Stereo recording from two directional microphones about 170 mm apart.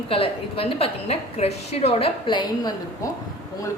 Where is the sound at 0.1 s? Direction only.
35° left (ahead or behind).